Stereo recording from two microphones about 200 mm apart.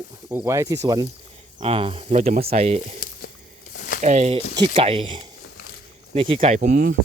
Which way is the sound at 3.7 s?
40° left (ahead or behind).